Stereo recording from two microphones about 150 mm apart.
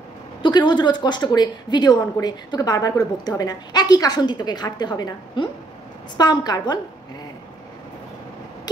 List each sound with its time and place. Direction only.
0.4 s speech: 30° left (ahead or behind)